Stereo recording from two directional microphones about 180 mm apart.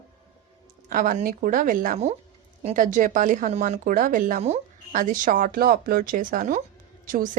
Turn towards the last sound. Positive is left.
turn(degrees=-50)  # may be behind; listen again after turning